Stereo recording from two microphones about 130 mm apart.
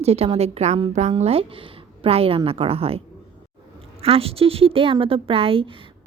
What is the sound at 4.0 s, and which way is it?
A woman's voice, 45° right (ahead or behind).